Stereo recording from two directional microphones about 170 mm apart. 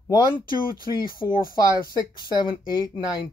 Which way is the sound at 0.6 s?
55° left (ahead or behind).